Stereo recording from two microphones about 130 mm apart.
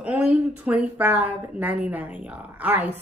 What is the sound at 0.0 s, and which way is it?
A woman's voice, 10° right (ahead or behind).